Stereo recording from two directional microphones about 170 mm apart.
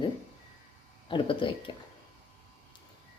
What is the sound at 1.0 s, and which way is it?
Speech, 30° left (ahead or behind).